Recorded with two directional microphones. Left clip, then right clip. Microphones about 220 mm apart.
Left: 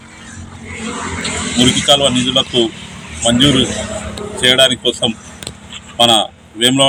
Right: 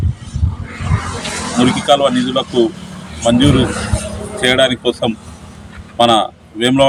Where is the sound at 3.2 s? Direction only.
5° right (ahead or behind).